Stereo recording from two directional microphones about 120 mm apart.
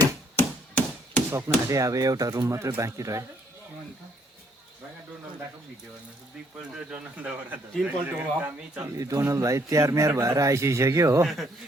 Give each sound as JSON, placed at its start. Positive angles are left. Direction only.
{"t": 0.3, "sound": "chop", "side_deg": 15}
{"t": 1.3, "sound": "a man's voice", "side_deg": -25}
{"t": 6.9, "sound": "speech", "side_deg": -10}
{"t": 8.8, "sound": "a man's voice", "side_deg": -30}